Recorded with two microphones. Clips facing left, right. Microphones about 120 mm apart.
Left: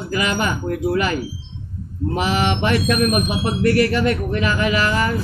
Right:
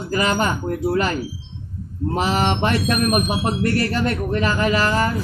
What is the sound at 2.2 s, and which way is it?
Speech, 35° right (ahead or behind).